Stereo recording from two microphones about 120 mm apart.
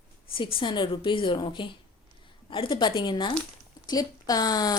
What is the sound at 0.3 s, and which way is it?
A woman's voice, 50° left (ahead or behind).